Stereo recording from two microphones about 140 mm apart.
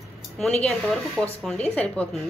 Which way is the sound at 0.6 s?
Centre (ahead or behind).